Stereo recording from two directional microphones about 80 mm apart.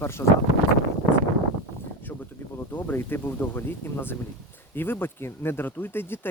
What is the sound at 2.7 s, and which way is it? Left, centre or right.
Speech, left.